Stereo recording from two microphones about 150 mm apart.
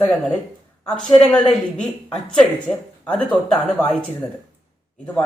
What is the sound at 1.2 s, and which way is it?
Speech, 5° left (ahead or behind).